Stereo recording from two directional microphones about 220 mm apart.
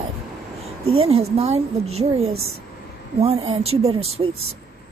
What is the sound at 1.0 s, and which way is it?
A woman's voice, 25° right (ahead or behind).